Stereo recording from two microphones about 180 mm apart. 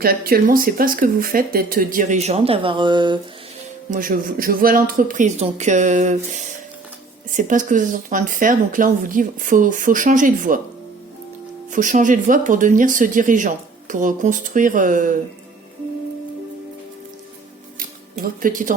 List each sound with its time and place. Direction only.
0.0 s speech: 55° right (ahead or behind); by 3.2 s 25° right (ahead or behind)
3.9 s speech: 50° right (ahead or behind)
11.7 s speech: 45° right (ahead or behind)
17.7 s music: 50° right (ahead or behind)